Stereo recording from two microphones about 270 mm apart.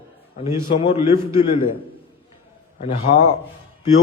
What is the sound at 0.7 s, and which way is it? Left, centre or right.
Speech, left.